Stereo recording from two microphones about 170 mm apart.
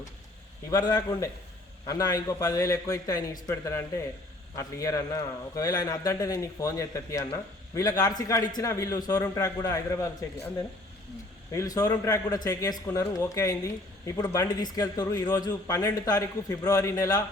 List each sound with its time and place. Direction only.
0.7 s a man's voice: 25° left (ahead or behind)
11.5 s a man's voice: 20° left (ahead or behind)